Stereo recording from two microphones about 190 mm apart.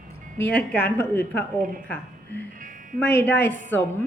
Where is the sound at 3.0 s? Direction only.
65° left (ahead or behind).